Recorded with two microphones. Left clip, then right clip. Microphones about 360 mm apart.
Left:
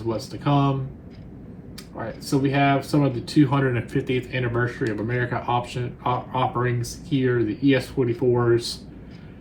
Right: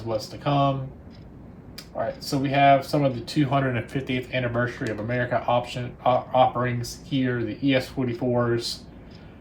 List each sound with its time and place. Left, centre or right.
0.4 s speech: centre
2.4 s speech: centre